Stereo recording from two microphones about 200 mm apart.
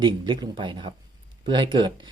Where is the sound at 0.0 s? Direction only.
25° right (ahead or behind).